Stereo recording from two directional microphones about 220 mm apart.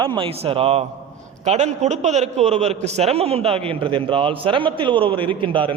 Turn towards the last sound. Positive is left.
turn(degrees=-25)  # may be behind; listen again after turning